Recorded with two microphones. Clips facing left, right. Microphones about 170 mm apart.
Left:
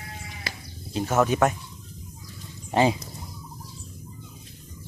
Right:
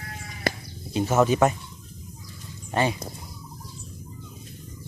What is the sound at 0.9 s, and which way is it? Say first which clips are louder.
Speech: right 2 dB; 5° right (ahead or behind).